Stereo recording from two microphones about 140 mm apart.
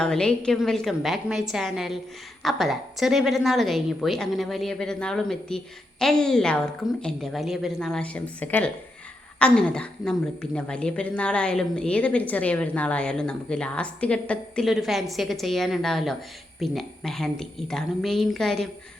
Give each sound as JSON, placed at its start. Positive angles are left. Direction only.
{"t": 0.0, "sound": "a woman's voice", "side_deg": 5}